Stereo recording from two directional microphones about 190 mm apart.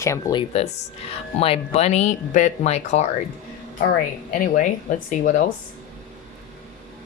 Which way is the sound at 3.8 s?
50° left (ahead or behind).